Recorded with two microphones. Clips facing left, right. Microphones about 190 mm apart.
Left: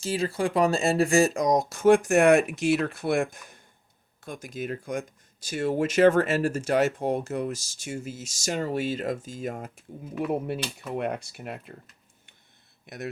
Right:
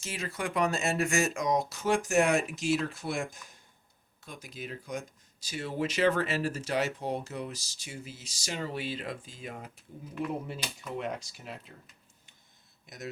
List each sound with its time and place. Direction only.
0.0 s speech: 30° left (ahead or behind); by 3.6 s 60° left (ahead or behind)
4.2 s speech: 50° left (ahead or behind)
10.9 s speech: 60° left (ahead or behind)
12.8 s a sound: 60° left (ahead or behind)